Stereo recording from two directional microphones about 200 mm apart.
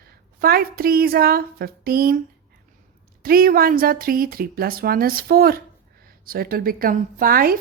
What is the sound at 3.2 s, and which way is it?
A woman's voice, 45° right (ahead or behind).